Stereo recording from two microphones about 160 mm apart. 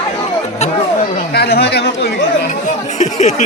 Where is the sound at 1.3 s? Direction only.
90° left.